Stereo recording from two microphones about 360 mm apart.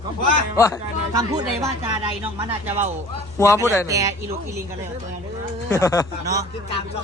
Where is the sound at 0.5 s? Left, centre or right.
Centre.